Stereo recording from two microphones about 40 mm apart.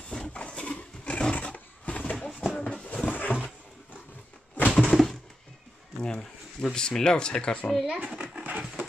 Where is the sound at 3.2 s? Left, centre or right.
Left.